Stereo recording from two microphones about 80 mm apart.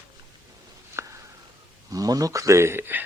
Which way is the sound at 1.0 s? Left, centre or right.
Right.